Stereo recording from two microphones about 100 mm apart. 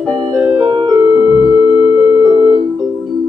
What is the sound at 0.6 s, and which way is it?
Music, 60° right (ahead or behind).